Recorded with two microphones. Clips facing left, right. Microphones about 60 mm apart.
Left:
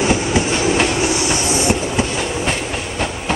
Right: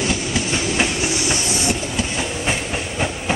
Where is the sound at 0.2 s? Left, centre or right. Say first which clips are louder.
Left 5 dB; left.